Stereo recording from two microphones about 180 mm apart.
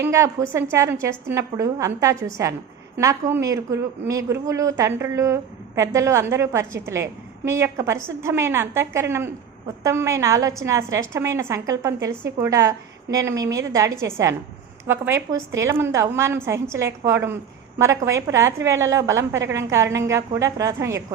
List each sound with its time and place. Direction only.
0.0 s a woman's voice: 15° right (ahead or behind)